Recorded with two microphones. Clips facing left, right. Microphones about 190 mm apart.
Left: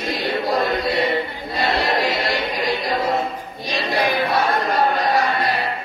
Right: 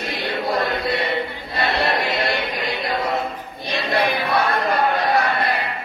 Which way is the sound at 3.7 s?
60° right (ahead or behind).